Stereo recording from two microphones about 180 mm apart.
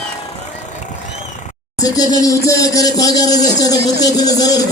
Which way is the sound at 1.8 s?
20° left (ahead or behind).